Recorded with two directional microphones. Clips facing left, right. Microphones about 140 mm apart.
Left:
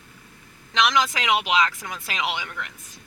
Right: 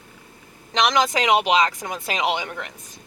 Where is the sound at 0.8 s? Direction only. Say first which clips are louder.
Right 3 dB; 40° right (ahead or behind).